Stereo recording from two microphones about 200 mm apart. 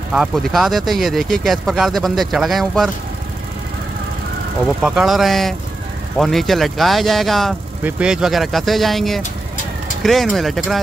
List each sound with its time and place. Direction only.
0.1 s speech: centre (ahead or behind)
4.6 s speech: centre (ahead or behind)